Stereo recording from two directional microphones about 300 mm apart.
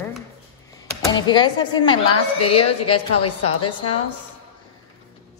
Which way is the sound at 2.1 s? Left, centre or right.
Left.